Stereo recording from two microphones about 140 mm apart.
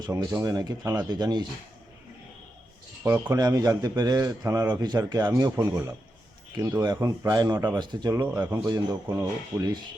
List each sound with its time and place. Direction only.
0.1 s a man's voice: 20° right (ahead or behind)
3.0 s a man's voice: 20° right (ahead or behind)